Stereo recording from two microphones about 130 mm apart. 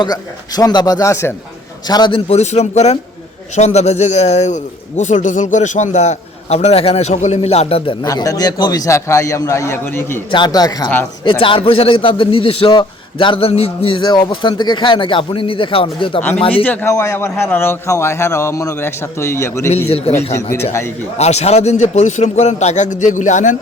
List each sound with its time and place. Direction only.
0.0 s a man's voice: 30° left (ahead or behind)
1.9 s a man's voice: 35° left (ahead or behind)
2.3 s a man's voice: 60° left (ahead or behind)
8.0 s a man's voice: 25° left (ahead or behind)
10.3 s a man's voice: 30° left (ahead or behind)
11.2 s a man's voice: 40° left (ahead or behind)
16.6 s a man's voice: 20° left (ahead or behind)
21.2 s a man's voice: 55° left (ahead or behind)